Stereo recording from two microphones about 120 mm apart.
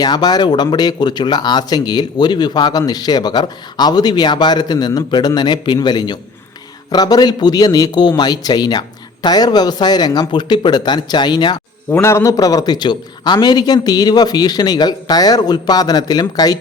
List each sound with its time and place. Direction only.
0.0 s speech: 35° left (ahead or behind)
11.9 s speech: 20° left (ahead or behind)